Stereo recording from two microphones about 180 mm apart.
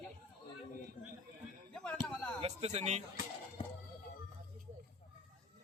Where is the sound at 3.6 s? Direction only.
30° left (ahead or behind).